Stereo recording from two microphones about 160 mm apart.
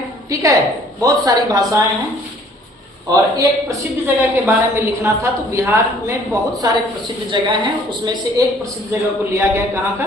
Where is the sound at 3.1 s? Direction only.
25° right (ahead or behind).